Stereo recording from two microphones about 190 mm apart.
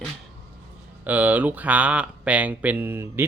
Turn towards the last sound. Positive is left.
turn(degrees=-10)  # may be behind; listen again after turning